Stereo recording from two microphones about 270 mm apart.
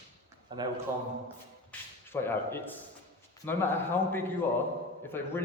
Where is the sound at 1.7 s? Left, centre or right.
Centre.